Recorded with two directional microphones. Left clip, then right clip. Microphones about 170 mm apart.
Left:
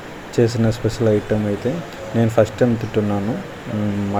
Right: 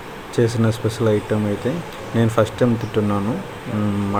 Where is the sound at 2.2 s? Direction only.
Centre (ahead or behind).